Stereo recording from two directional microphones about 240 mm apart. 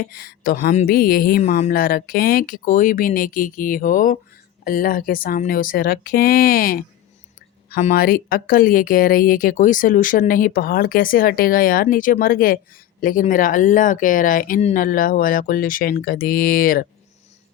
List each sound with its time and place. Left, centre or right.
0.0 s speech: left